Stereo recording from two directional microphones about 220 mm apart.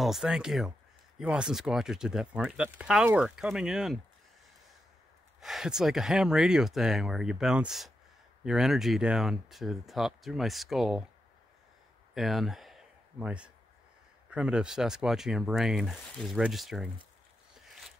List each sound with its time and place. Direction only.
0.0 s speech: centre (ahead or behind)
5.4 s speech: centre (ahead or behind)
12.1 s a sound: centre (ahead or behind)
14.3 s speech: 5° right (ahead or behind)